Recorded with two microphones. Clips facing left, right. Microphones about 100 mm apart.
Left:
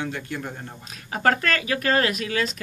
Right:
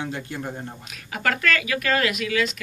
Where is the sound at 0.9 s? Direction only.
35° left (ahead or behind).